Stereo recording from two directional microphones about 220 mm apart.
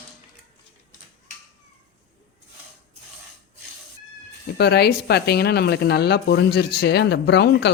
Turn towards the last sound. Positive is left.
turn(degrees=50)  # may be behind; listen again after turning